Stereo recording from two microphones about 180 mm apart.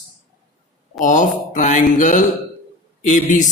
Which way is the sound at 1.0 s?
45° left (ahead or behind).